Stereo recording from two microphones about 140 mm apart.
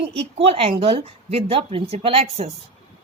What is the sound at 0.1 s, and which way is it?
A woman's voice, 45° right (ahead or behind).